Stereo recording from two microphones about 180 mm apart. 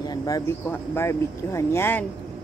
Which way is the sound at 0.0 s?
20° left (ahead or behind).